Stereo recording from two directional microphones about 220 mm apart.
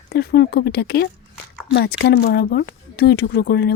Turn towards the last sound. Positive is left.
turn(degrees=50)  # may be behind; listen again after turning